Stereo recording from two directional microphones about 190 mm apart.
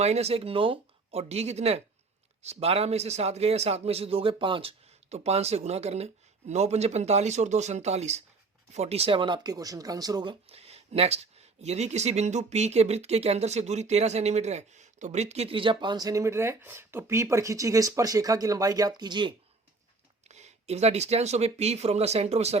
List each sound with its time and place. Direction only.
0.0 s a man's voice: 35° right (ahead or behind)
20.2 s a man's voice: 35° right (ahead or behind)